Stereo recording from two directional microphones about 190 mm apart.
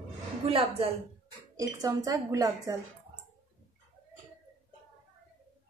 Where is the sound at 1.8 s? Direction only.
20° right (ahead or behind).